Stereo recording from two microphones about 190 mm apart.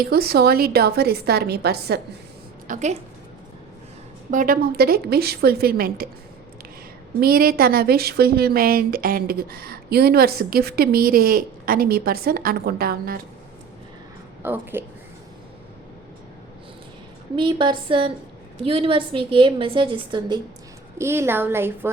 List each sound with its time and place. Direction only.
0.0 s a woman's voice: 55° right (ahead or behind)
2.6 s a woman's voice: 40° right (ahead or behind)
4.3 s a woman's voice: 45° right (ahead or behind)
7.2 s a woman's voice: 50° right (ahead or behind)
14.4 s a woman's voice: 10° right (ahead or behind)
17.3 s a woman's voice: 25° right (ahead or behind)
21.0 s a woman's voice: 15° right (ahead or behind)